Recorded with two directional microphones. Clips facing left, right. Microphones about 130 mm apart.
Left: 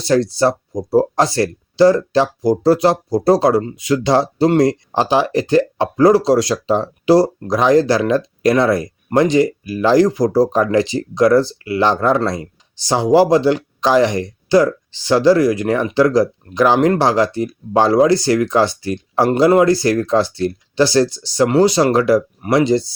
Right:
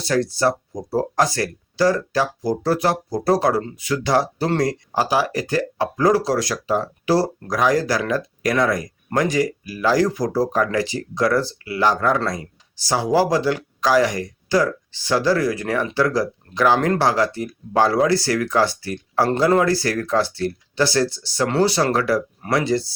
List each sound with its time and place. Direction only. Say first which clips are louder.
0.1 s speech: left 5 dB; 25° left (ahead or behind)